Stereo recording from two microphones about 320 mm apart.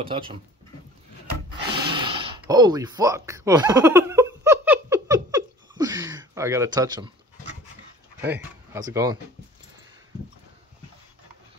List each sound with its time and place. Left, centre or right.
0.0 s speech: centre
1.8 s a sound: centre
8.2 s speech: centre